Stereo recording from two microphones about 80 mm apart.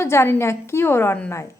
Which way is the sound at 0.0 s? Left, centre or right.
Left.